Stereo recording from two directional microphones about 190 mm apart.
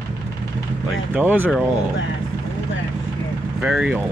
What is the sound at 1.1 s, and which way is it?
Speech, 10° right (ahead or behind).